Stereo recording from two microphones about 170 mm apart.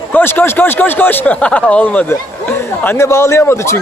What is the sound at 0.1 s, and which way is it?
Speech, 10° left (ahead or behind).